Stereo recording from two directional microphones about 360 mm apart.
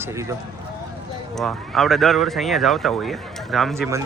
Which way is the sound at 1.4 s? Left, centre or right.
Centre.